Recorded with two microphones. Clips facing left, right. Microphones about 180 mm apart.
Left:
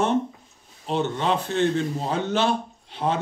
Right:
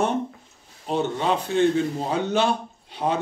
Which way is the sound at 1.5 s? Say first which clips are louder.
Right 5 dB; 10° right (ahead or behind).